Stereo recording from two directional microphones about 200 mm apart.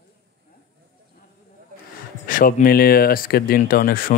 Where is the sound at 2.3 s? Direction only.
45° left (ahead or behind).